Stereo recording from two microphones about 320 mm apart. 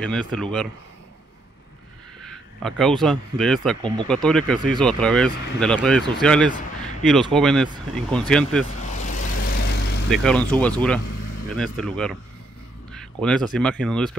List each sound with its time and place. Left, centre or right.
0.0 s speech: centre
2.6 s speech: centre
3.8 s speech: centre
4.1 s speech: centre
9.7 s vehicle: left
10.0 s speech: centre